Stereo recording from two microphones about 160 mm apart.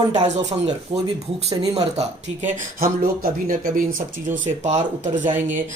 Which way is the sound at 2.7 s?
65° right (ahead or behind).